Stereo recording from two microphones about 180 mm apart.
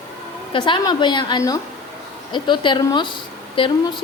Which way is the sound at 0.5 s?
25° left (ahead or behind).